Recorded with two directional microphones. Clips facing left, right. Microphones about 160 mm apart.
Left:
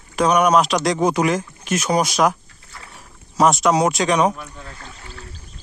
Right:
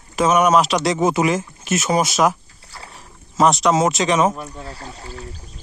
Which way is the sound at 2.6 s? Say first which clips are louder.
Right 3 dB; 30° right (ahead or behind).